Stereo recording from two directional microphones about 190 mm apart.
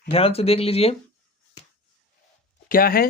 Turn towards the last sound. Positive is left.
turn(degrees=50)  # may be behind; listen again after turning